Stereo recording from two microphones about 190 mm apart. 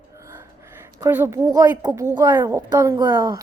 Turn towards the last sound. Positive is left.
turn(degrees=-15)  # may be behind; listen again after turning